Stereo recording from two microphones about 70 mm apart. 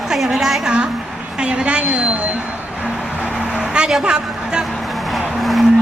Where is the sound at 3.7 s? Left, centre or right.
Centre.